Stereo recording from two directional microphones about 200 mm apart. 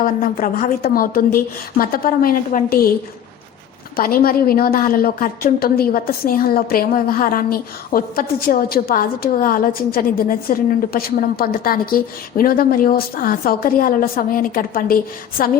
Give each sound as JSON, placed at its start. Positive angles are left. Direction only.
{"t": 0.0, "sound": "a woman's voice", "side_deg": 45}
{"t": 3.9, "sound": "a woman's voice", "side_deg": 45}